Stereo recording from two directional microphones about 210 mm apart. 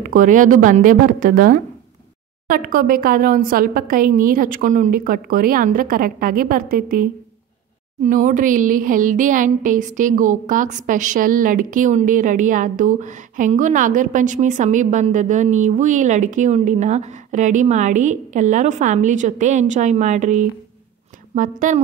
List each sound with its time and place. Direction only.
0.0 s speech: 40° right (ahead or behind)